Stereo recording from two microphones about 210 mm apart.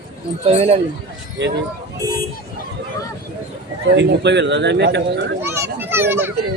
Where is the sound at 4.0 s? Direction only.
55° right (ahead or behind).